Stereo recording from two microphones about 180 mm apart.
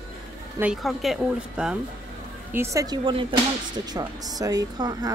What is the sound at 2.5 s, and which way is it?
Speech, 15° right (ahead or behind).